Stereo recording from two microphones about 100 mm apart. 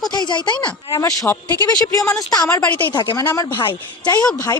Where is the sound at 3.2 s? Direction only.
35° left (ahead or behind).